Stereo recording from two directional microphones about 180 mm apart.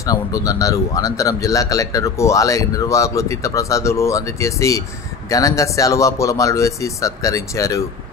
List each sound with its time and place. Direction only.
0.0 s speech: 20° left (ahead or behind)